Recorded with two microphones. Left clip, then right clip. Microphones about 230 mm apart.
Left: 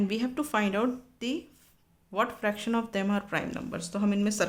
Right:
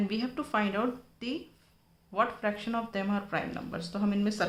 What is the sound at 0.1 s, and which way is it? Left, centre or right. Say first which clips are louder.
Speech: left 2 dB; left.